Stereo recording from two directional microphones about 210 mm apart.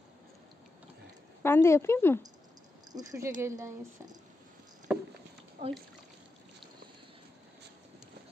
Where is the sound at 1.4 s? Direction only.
10° left (ahead or behind).